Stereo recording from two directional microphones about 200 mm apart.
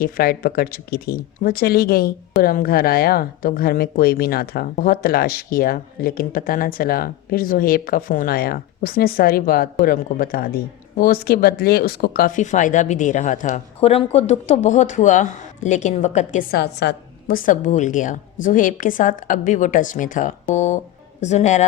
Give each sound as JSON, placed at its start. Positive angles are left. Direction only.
{"t": 0.0, "sound": "a woman's voice", "side_deg": 50}